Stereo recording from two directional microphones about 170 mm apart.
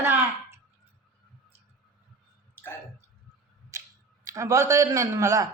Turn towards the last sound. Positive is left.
turn(degrees=-20)  # may be behind; listen again after turning